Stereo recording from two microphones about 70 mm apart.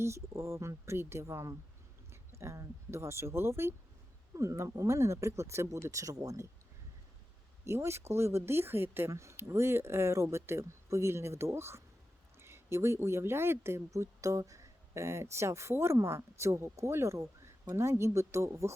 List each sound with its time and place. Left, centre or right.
0.0 s speech: right
7.6 s speech: right